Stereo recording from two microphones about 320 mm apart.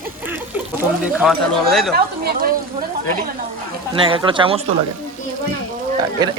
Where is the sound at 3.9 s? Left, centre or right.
Centre.